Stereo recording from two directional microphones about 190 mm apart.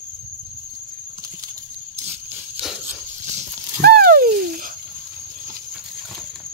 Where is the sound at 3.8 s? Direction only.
55° right (ahead or behind).